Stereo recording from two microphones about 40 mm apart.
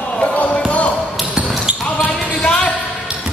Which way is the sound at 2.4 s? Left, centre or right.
Left.